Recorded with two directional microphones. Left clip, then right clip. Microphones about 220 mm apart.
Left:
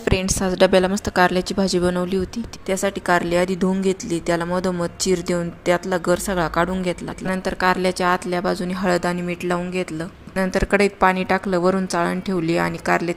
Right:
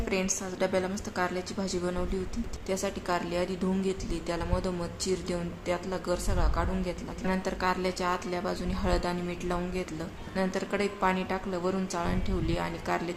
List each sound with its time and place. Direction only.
0.0 s a woman's voice: 40° left (ahead or behind)